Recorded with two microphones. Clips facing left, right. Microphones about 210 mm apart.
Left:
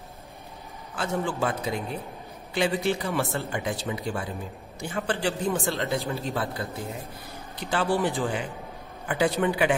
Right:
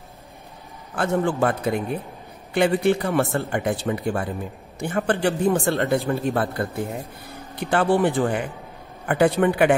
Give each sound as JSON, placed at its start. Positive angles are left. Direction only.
{"t": 0.9, "sound": "speech", "side_deg": -55}